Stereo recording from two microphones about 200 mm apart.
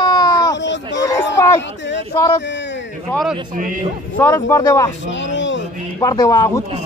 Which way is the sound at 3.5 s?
45° right (ahead or behind).